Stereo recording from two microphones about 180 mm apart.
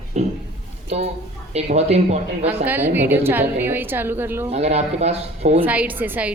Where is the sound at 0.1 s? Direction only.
40° right (ahead or behind).